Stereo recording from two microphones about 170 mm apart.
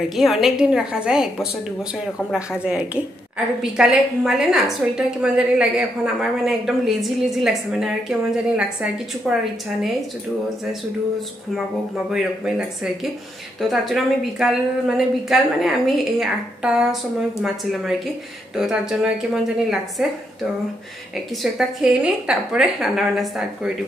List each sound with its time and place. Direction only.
0.1 s a woman's voice: centre (ahead or behind)
12.1 s a woman's voice: 5° right (ahead or behind)
18.6 s a woman's voice: 5° right (ahead or behind)
21.4 s a woman's voice: 5° right (ahead or behind)